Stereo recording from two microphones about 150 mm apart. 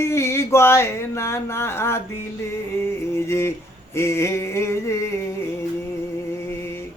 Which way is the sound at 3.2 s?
15° left (ahead or behind).